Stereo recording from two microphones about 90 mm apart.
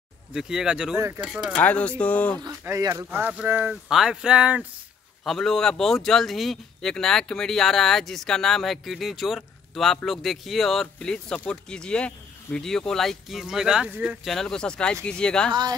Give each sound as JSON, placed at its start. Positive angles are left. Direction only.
{"t": 0.3, "sound": "speech", "side_deg": -5}
{"t": 0.9, "sound": "speech", "side_deg": -30}
{"t": 1.2, "sound": "speech", "side_deg": -5}
{"t": 1.6, "sound": "speech", "side_deg": 15}
{"t": 2.7, "sound": "speech", "side_deg": -35}
{"t": 3.1, "sound": "speech", "side_deg": -20}
{"t": 3.9, "sound": "speech", "side_deg": -5}
{"t": 5.2, "sound": "speech", "side_deg": 0}
{"t": 14.2, "sound": "speech", "side_deg": 5}